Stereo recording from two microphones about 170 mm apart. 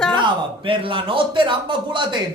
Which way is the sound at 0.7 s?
30° right (ahead or behind).